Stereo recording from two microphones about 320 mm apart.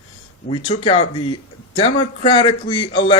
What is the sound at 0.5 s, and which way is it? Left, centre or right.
Speech, centre.